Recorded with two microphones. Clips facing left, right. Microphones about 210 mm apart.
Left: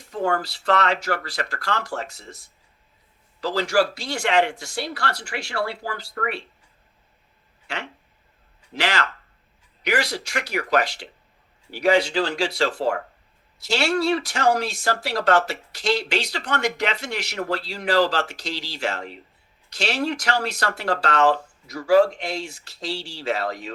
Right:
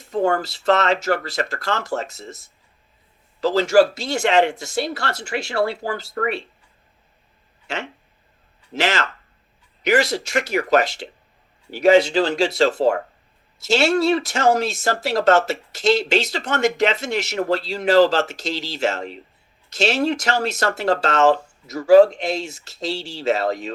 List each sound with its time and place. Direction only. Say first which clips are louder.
0.1 s speech: right 4 dB; 25° right (ahead or behind)
7.7 s speech: right 4 dB; 25° right (ahead or behind)